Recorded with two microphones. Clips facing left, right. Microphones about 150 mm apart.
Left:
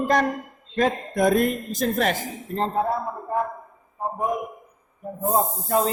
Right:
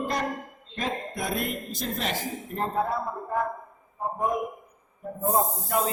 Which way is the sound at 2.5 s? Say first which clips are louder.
Left 4 dB; 25° left (ahead or behind).